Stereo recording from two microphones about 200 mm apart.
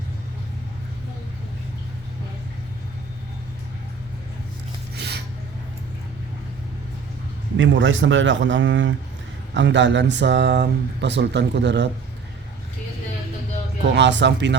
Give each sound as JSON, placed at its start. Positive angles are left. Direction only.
{"t": 4.9, "sound": "filing", "side_deg": -55}
{"t": 7.5, "sound": "a man's voice", "side_deg": -65}
{"t": 13.9, "sound": "speech", "side_deg": -60}